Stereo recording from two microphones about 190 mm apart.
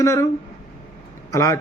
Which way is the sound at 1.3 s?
15° left (ahead or behind).